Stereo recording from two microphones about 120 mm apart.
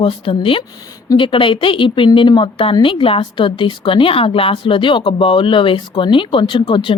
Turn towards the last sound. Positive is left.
turn(degrees=45)  # may be behind; listen again after turning